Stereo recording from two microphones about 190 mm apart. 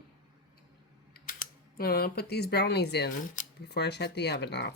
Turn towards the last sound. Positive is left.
turn(degrees=65)  # may be behind; listen again after turning